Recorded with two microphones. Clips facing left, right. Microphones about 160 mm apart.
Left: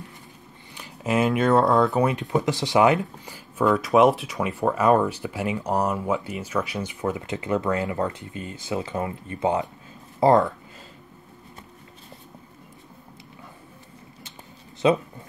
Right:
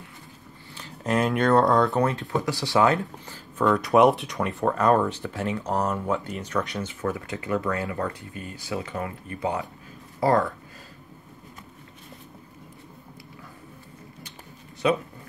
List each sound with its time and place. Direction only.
0.7 s speech: 5° left (ahead or behind); by 10.5 s 20° left (ahead or behind)
14.8 s speech: 25° left (ahead or behind)